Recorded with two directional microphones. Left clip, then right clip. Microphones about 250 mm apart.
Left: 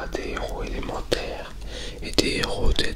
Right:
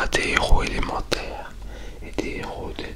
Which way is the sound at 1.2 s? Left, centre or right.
Centre.